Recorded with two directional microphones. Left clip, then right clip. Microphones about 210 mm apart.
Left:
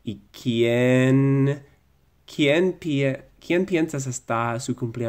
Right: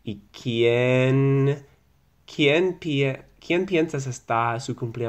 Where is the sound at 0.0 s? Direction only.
25° left (ahead or behind).